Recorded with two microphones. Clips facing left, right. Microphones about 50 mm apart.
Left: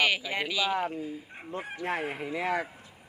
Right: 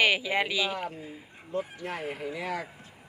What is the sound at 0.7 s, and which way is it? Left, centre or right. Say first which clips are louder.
Speech: left 5 dB; left.